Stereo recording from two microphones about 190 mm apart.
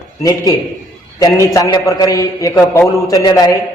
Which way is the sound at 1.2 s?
20° left (ahead or behind).